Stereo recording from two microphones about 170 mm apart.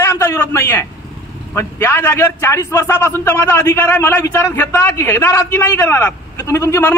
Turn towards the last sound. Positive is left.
turn(degrees=15)  # may be behind; listen again after turning